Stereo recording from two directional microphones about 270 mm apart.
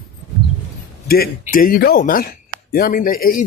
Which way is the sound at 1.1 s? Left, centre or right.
Left.